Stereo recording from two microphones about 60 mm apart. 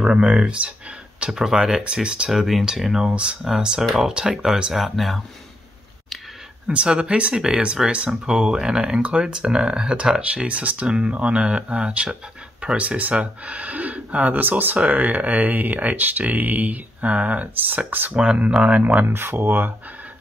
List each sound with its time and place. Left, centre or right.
0.0 s speech: centre
2.3 s speech: centre
6.7 s speech: centre
18.1 s speech: centre
19.0 s speech: right